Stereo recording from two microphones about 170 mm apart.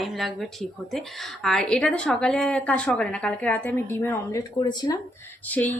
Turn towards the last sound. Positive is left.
turn(degrees=10)  # may be behind; listen again after turning